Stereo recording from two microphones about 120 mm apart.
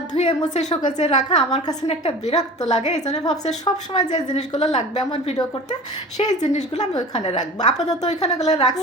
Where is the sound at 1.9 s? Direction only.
65° left (ahead or behind).